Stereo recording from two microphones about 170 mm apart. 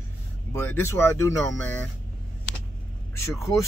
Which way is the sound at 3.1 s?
15° left (ahead or behind).